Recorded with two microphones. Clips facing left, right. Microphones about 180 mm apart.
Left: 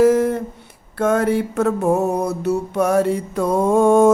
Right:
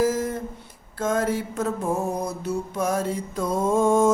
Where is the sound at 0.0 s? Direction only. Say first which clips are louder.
Left 9 dB; 65° left (ahead or behind).